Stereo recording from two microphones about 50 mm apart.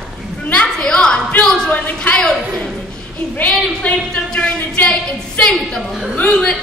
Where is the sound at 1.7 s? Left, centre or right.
Left.